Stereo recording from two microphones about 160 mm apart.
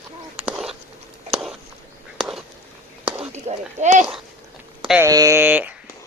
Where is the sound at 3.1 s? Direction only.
40° right (ahead or behind).